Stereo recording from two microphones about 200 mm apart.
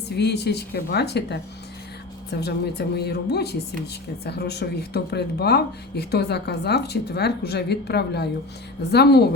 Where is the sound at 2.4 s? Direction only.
55° left (ahead or behind).